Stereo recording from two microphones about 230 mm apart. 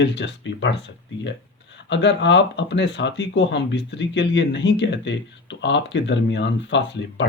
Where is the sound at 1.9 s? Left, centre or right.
Left.